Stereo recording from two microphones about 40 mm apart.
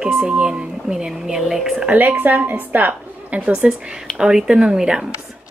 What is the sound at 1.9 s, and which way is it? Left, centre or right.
A woman's voice, right.